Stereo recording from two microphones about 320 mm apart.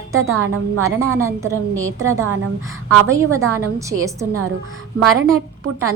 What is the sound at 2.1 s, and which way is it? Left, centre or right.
Speech, right.